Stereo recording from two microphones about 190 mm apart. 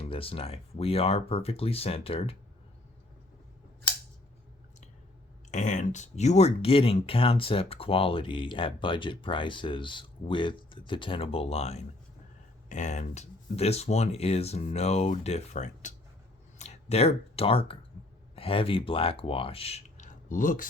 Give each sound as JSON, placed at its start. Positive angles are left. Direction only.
{"t": 0.0, "sound": "speech", "side_deg": 30}
{"t": 5.5, "sound": "speech", "side_deg": 40}